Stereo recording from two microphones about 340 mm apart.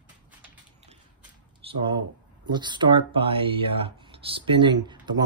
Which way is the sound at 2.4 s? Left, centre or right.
Centre.